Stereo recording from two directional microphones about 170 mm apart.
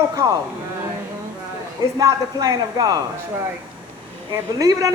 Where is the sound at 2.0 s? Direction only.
20° right (ahead or behind).